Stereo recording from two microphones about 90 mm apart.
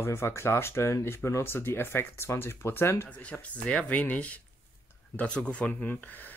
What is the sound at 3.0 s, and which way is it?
Speech, 15° left (ahead or behind).